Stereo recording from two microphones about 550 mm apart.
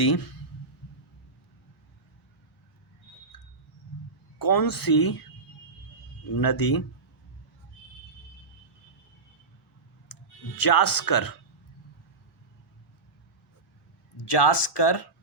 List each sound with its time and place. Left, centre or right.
4.4 s speech: left
6.3 s speech: left
10.1 s clicking: left
10.6 s speech: left
14.2 s speech: left